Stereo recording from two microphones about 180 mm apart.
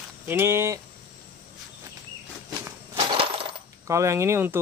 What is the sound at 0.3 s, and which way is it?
Speech, 15° right (ahead or behind).